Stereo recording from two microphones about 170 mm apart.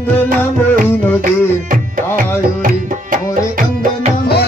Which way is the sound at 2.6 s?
55° right (ahead or behind).